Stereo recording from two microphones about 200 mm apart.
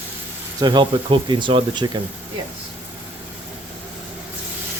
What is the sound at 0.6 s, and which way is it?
Speech, 20° right (ahead or behind).